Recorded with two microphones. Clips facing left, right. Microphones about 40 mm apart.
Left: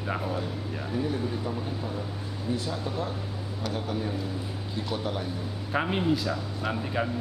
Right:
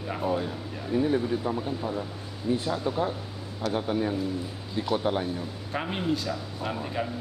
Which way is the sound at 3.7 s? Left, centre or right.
Right.